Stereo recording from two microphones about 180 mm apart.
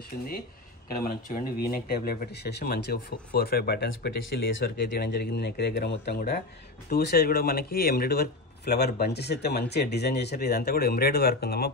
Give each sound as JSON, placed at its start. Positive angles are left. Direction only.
{"t": 0.8, "sound": "speech", "side_deg": 55}
{"t": 4.6, "sound": "speech", "side_deg": 60}